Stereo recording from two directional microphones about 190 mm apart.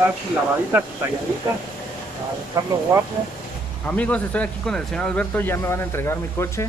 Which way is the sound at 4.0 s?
5° left (ahead or behind).